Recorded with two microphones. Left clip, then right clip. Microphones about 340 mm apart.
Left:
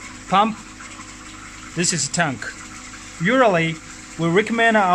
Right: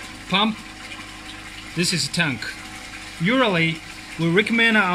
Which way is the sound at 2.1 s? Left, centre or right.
Left.